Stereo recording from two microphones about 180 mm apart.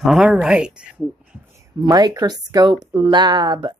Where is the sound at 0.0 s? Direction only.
5° right (ahead or behind).